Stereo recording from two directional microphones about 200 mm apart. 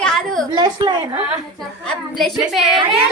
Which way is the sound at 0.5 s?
20° right (ahead or behind).